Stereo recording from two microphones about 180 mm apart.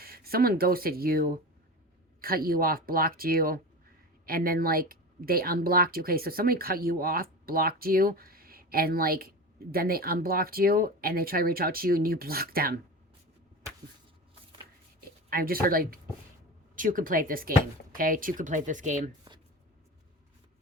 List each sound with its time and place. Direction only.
0.0 s speech: 55° right (ahead or behind)
15.3 s speech: 55° right (ahead or behind)